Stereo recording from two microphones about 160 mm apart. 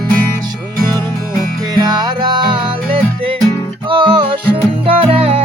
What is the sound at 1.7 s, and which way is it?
Music, 25° right (ahead or behind).